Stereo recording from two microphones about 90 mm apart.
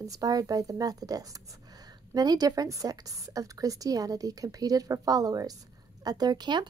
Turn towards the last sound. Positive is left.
turn(degrees=-55)  # may be behind; listen again after turning